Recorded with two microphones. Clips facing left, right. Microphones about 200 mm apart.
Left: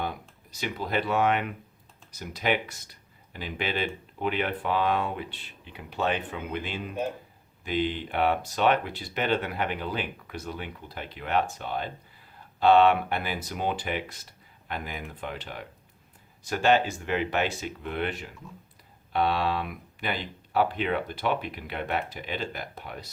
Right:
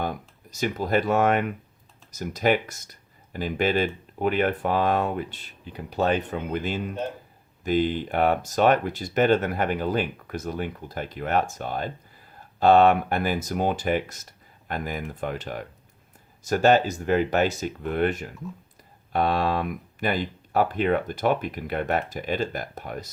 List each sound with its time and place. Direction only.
0.0 s speech: 45° right (ahead or behind)